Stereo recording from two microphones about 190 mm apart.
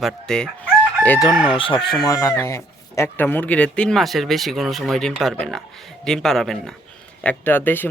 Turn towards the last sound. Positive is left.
turn(degrees=10)  # may be behind; listen again after turning